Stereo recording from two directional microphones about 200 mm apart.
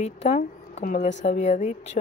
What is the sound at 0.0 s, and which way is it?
Speech, 35° left (ahead or behind).